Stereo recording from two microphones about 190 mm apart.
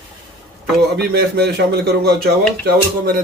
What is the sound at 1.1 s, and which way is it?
Speech, 55° right (ahead or behind).